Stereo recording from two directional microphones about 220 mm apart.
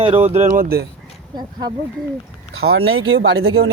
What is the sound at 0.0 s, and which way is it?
Speech, 25° right (ahead or behind).